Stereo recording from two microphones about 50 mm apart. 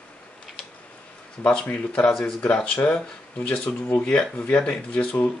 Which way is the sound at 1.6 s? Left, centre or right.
Left.